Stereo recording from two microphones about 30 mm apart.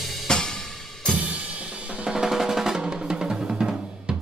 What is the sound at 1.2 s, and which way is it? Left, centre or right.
Drum kit, right.